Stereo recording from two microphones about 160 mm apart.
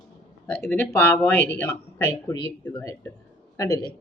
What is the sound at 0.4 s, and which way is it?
A man's voice, 5° left (ahead or behind).